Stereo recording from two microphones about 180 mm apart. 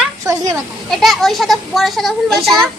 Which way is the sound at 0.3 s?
15° right (ahead or behind).